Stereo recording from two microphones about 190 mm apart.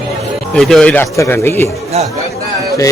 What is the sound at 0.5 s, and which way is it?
A man's voice, 5° left (ahead or behind).